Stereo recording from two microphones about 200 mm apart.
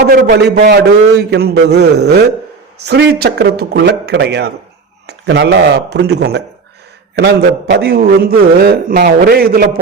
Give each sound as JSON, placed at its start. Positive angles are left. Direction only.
{"t": 0.0, "sound": "a man's voice", "side_deg": -50}
{"t": 7.7, "sound": "a man's voice", "side_deg": -55}